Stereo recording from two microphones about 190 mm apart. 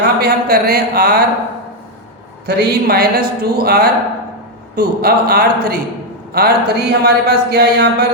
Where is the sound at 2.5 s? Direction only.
55° right (ahead or behind).